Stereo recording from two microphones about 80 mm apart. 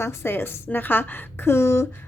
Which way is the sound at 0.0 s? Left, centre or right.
Left.